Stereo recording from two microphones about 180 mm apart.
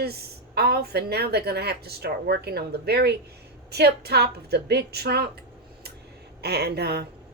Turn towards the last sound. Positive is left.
turn(degrees=-65)  # may be behind; listen again after turning